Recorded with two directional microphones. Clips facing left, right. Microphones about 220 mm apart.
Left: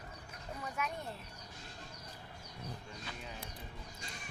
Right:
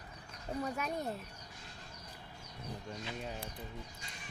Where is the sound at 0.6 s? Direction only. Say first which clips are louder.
Right 2 dB; 35° right (ahead or behind).